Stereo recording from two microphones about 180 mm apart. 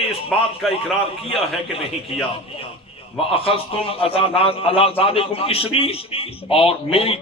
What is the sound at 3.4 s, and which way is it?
A man's voice, 30° left (ahead or behind).